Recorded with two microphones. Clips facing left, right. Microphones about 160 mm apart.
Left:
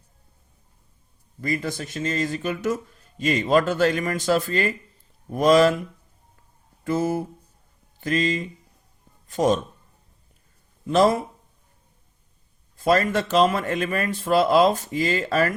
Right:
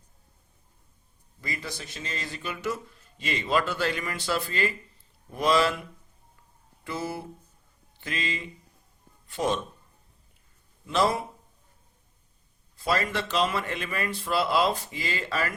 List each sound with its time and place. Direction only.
1.4 s speech: 50° left (ahead or behind)
6.8 s speech: 45° left (ahead or behind)
10.8 s speech: 45° left (ahead or behind)
12.7 s speech: 50° left (ahead or behind)